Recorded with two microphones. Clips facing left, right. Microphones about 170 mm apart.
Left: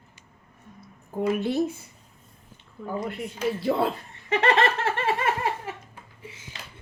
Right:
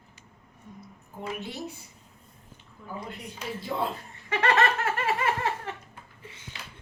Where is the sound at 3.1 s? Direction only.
70° left (ahead or behind).